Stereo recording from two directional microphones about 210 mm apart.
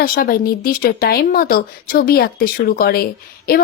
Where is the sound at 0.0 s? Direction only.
45° left (ahead or behind).